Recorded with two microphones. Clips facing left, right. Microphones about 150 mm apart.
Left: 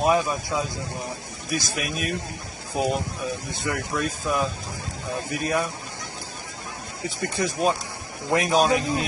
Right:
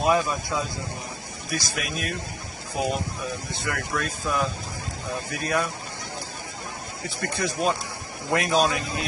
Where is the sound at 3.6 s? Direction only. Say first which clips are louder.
Left 3 dB; 15° left (ahead or behind).